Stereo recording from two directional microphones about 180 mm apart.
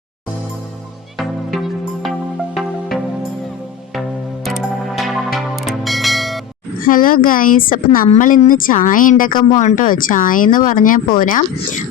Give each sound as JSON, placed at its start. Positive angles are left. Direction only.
{"t": 1.6, "sound": "music", "side_deg": 0}
{"t": 4.4, "sound": "music", "side_deg": 0}
{"t": 6.8, "sound": "speech", "side_deg": 50}